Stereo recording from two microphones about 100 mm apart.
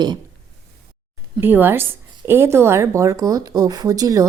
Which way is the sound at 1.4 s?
20° right (ahead or behind).